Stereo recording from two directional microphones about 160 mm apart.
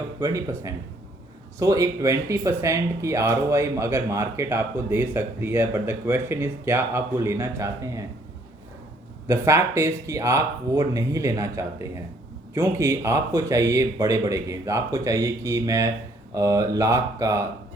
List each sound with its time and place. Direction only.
0.2 s speech: 20° right (ahead or behind)
9.2 s speech: 15° right (ahead or behind)